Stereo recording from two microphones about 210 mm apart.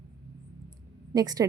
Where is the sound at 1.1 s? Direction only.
20° right (ahead or behind).